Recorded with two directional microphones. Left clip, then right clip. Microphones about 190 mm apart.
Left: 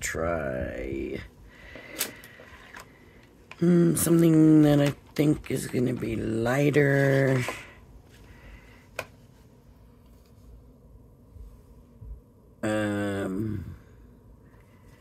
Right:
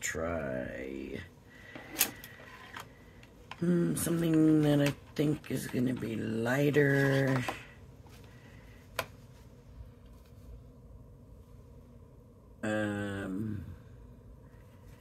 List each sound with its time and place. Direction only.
0.0 s speech: 50° left (ahead or behind)
3.5 s speech: 55° left (ahead or behind)
12.5 s a sound: 45° left (ahead or behind)